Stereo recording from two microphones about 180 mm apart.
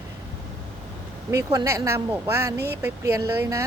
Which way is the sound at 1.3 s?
20° right (ahead or behind).